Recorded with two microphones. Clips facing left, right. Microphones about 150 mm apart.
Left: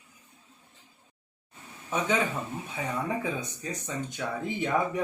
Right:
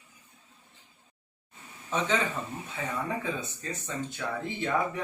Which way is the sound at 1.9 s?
10° left (ahead or behind).